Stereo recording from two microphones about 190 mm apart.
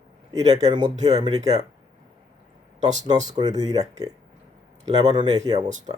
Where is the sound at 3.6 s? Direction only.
20° right (ahead or behind).